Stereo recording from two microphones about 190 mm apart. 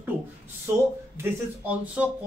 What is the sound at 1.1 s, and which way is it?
Speech, 10° right (ahead or behind).